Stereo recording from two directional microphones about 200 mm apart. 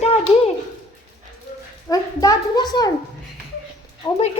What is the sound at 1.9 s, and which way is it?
A child's voice, 15° left (ahead or behind).